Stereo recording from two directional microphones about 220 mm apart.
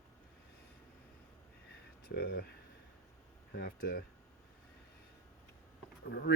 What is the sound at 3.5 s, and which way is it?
Speech, 40° left (ahead or behind).